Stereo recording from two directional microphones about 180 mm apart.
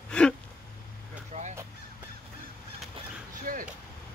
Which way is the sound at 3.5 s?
50° right (ahead or behind).